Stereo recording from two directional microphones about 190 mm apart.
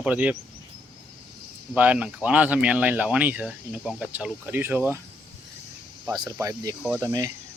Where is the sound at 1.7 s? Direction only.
5° right (ahead or behind).